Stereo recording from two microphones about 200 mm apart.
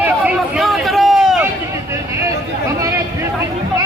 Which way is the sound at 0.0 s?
5° right (ahead or behind).